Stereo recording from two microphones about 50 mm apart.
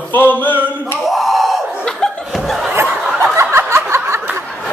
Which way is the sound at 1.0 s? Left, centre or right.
Centre.